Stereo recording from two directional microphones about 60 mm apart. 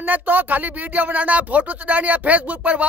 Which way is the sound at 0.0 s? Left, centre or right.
Right.